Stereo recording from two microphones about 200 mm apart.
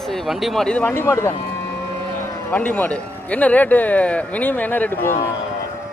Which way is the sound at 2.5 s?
10° left (ahead or behind).